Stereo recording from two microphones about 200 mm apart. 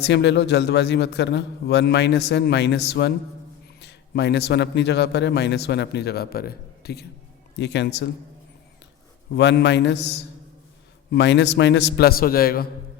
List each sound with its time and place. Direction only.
0.0 s a man's voice: 60° left (ahead or behind)
9.3 s a man's voice: 60° left (ahead or behind)